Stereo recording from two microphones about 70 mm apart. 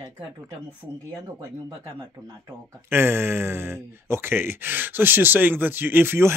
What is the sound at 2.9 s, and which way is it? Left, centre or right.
Speech, right.